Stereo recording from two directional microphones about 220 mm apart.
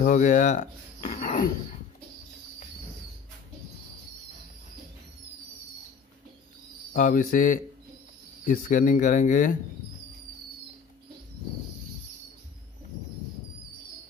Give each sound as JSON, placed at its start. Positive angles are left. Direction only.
{"t": 0.0, "sound": "speech", "side_deg": 35}
{"t": 6.9, "sound": "speech", "side_deg": 40}